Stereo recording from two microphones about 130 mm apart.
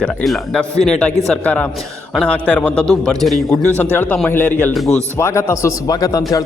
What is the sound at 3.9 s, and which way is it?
A man's voice, 15° left (ahead or behind).